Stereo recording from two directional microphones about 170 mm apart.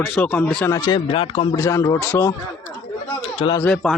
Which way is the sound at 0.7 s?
20° left (ahead or behind).